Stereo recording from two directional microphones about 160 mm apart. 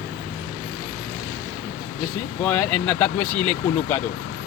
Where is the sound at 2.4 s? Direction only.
10° left (ahead or behind).